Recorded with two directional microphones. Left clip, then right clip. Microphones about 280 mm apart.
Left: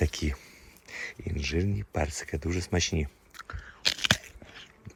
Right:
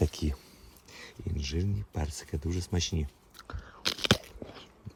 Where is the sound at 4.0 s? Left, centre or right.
Right.